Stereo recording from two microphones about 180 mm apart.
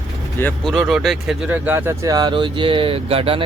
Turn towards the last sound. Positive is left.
turn(degrees=-30)  # may be behind; listen again after turning